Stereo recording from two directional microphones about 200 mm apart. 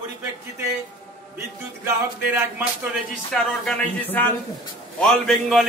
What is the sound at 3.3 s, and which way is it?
A man's voice, centre (ahead or behind).